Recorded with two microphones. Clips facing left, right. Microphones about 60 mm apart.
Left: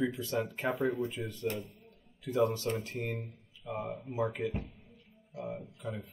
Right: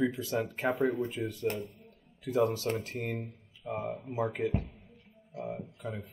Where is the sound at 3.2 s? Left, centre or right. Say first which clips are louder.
Right 3 dB; centre.